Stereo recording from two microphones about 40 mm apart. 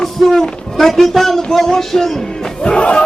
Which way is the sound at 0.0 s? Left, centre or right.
Centre.